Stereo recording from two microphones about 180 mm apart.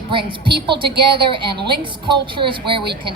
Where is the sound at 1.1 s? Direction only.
25° right (ahead or behind).